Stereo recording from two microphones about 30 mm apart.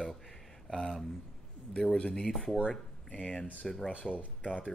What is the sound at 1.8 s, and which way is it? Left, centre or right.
Speech, left.